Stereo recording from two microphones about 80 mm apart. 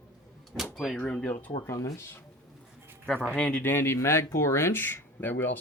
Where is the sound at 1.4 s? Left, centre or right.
Left.